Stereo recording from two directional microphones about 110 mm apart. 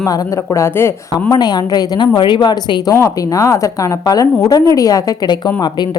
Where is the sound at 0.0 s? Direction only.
30° left (ahead or behind).